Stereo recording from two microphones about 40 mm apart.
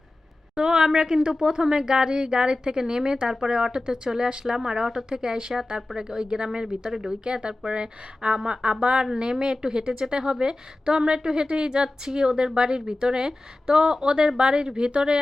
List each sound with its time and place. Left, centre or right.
0.5 s a woman's voice: centre